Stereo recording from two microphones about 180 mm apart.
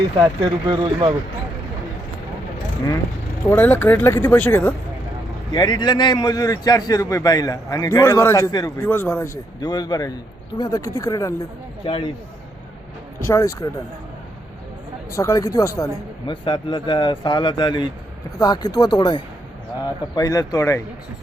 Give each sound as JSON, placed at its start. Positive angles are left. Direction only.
{"t": 0.4, "sound": "speech", "side_deg": -25}
{"t": 3.4, "sound": "speech", "side_deg": 10}
{"t": 5.5, "sound": "a man's voice", "side_deg": 25}
{"t": 11.9, "sound": "a man's voice", "side_deg": 30}
{"t": 13.2, "sound": "speech", "side_deg": 15}
{"t": 15.1, "sound": "a man's voice", "side_deg": 15}